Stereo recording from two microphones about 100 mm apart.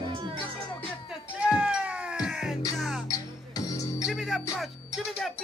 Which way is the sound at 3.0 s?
40° left (ahead or behind).